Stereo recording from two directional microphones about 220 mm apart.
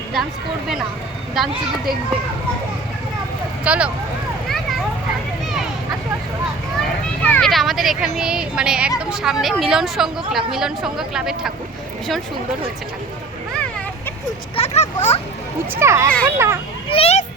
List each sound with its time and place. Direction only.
1.4 s speech: centre (ahead or behind)
3.6 s speech: 5° right (ahead or behind)
7.2 s speech: 5° left (ahead or behind)
14.5 s speech: 30° left (ahead or behind)
15.7 s a child's voice: 10° right (ahead or behind)
16.9 s a child's voice: 30° left (ahead or behind)